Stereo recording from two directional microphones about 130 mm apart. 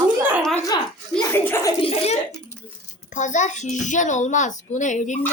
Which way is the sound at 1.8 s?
45° left (ahead or behind).